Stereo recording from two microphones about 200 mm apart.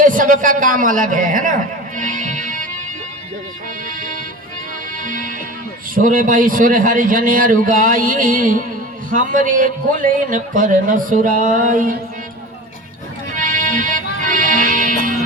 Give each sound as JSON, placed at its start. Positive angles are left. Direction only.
{"t": 0.0, "sound": "a man's voice", "side_deg": -40}
{"t": 2.0, "sound": "music", "side_deg": -40}
{"t": 5.0, "sound": "music", "side_deg": -45}
{"t": 5.9, "sound": "a man's voice", "side_deg": -45}
{"t": 13.3, "sound": "music", "side_deg": -40}